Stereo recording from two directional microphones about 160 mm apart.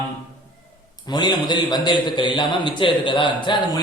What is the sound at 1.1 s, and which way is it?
A man's voice, 25° left (ahead or behind).